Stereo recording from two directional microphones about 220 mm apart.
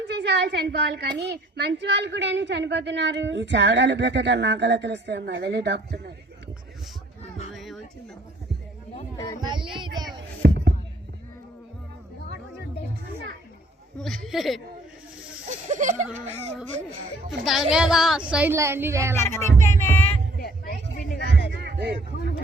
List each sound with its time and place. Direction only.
0.2 s a woman's voice: 50° right (ahead or behind)
7.5 s a sound: centre (ahead or behind)
9.1 s speech: 15° left (ahead or behind)
9.4 s speech: 20° right (ahead or behind)
10.4 s music: 45° right (ahead or behind)
14.0 s a woman's voice: centre (ahead or behind)
15.4 s speech: 35° right (ahead or behind)
17.2 s a woman's voice: centre (ahead or behind)
19.1 s music: 10° left (ahead or behind)
20.4 s a sound: 45° left (ahead or behind)
21.5 s heart sounds: 50° right (ahead or behind)